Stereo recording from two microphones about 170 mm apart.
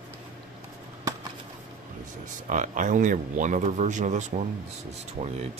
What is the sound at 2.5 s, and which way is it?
Speech, 50° right (ahead or behind).